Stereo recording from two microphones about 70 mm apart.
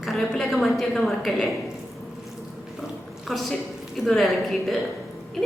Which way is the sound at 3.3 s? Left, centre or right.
Centre.